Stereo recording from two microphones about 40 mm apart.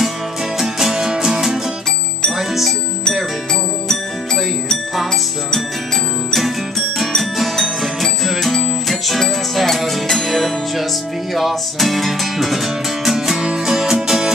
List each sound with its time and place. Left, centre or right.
0.6 s music: centre
7.2 s music: centre